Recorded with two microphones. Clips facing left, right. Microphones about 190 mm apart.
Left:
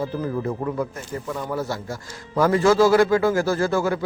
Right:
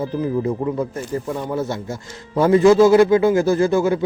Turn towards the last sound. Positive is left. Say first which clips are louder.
# right 5 dB
turn(degrees=-20)  # may be behind; listen again after turning